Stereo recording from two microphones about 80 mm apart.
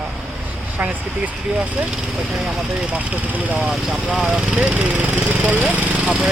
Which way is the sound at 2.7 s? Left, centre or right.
Centre.